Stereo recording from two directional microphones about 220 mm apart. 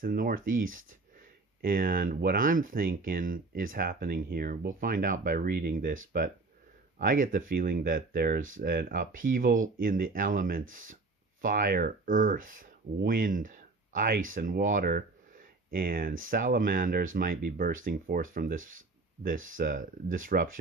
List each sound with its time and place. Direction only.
0.0 s speech: 40° right (ahead or behind)
7.0 s speech: 40° right (ahead or behind)